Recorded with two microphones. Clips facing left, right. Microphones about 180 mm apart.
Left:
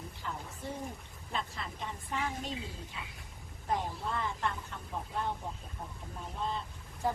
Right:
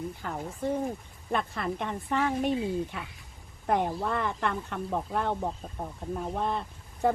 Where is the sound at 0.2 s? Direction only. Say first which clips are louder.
Right 8 dB; 55° right (ahead or behind).